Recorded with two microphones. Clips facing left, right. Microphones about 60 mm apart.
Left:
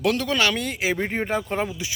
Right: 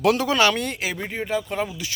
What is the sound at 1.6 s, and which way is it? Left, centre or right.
Speech, left.